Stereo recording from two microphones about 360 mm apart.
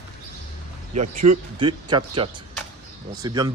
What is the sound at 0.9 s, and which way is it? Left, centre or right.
Speech, centre.